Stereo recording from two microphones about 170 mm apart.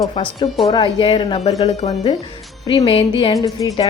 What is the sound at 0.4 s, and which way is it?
Speech, centre (ahead or behind).